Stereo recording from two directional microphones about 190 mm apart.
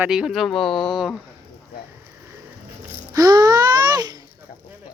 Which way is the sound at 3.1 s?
20° right (ahead or behind).